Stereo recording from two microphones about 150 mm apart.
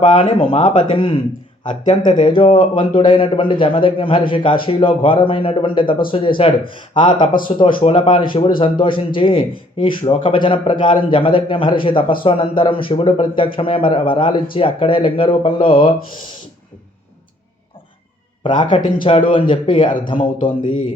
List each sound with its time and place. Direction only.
0.1 s a man's voice: 35° left (ahead or behind)
18.4 s a man's voice: 30° left (ahead or behind)